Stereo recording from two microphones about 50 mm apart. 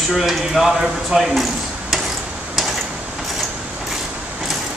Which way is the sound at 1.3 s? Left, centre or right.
Centre.